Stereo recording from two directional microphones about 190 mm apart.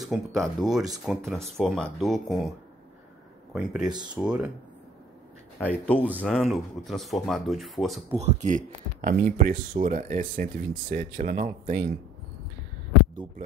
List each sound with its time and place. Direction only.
0.0 s speech: centre (ahead or behind)
3.5 s speech: 5° right (ahead or behind)
5.6 s speech: 10° left (ahead or behind)
8.1 s speech: 35° right (ahead or behind)